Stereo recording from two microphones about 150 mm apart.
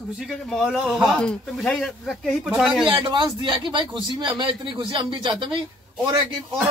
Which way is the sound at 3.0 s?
35° right (ahead or behind).